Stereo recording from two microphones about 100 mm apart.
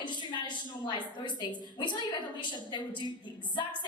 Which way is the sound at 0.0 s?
50° left (ahead or behind).